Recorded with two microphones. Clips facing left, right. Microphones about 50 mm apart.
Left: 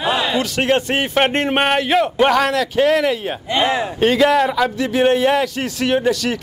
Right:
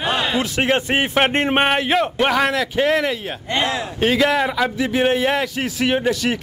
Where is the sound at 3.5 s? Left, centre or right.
Centre.